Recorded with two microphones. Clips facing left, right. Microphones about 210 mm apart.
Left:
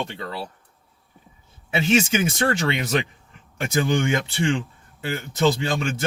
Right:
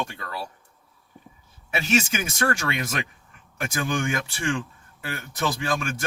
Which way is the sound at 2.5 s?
25° left (ahead or behind).